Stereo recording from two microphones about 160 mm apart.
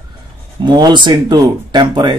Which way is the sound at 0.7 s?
25° right (ahead or behind).